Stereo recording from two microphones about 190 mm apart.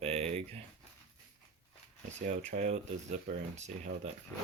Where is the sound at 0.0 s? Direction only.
35° right (ahead or behind).